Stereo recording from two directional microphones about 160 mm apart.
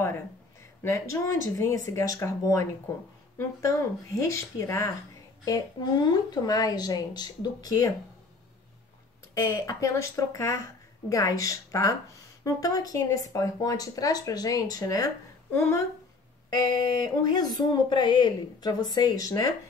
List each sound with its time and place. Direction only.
0.8 s a child's voice: 20° left (ahead or behind)
9.3 s speech: 20° left (ahead or behind)
16.7 s speech: 25° left (ahead or behind)